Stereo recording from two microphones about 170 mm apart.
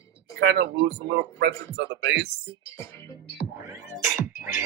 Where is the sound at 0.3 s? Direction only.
85° right.